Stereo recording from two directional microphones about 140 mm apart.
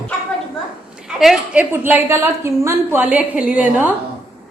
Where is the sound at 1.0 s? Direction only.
5° right (ahead or behind).